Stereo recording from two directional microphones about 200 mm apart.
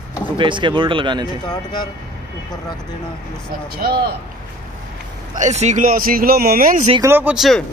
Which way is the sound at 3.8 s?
50° right (ahead or behind).